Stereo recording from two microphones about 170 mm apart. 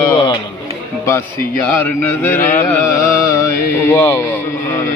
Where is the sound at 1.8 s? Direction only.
10° left (ahead or behind).